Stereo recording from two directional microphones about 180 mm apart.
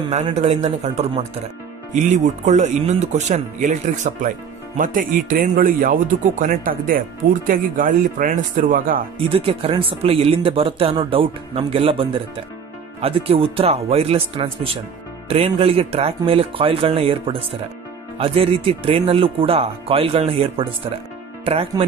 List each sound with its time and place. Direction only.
0.1 s speech: 40° right (ahead or behind)
9.3 s speech: 30° right (ahead or behind)